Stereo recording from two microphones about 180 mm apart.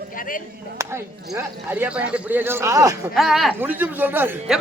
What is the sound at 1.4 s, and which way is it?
Speech, 10° right (ahead or behind).